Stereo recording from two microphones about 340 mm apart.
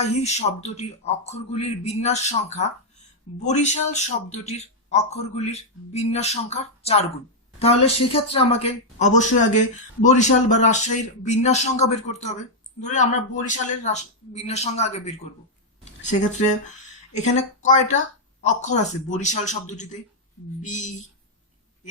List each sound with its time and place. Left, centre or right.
0.0 s a woman's voice: centre
15.8 s a sound: left
17.1 s a woman's voice: centre